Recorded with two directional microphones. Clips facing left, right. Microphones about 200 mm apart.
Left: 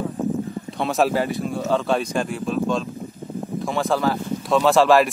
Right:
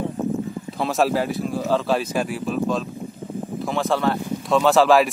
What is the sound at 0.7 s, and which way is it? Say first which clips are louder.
Speech: even; centre (ahead or behind).